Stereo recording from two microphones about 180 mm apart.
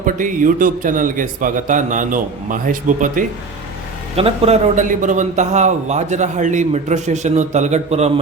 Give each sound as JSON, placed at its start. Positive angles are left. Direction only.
{"t": 0.0, "sound": "a man's voice", "side_deg": -45}
{"t": 4.1, "sound": "a man's voice", "side_deg": -35}